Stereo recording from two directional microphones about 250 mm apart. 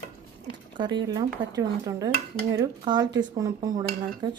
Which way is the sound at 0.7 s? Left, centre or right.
Centre.